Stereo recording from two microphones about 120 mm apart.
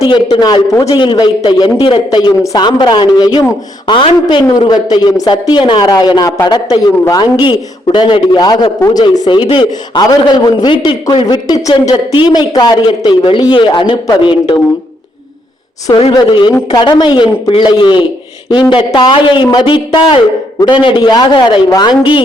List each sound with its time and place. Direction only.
0.0 s speech: 55° left (ahead or behind)
0.3 s a man's voice: 35° left (ahead or behind)
0.9 s a man's voice: 40° left (ahead or behind)
7.5 s a man's voice: 40° left (ahead or behind)
16.1 s a man's voice: 35° left (ahead or behind)